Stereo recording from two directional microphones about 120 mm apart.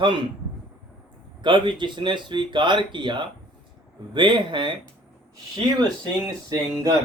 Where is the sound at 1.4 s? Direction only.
40° right (ahead or behind).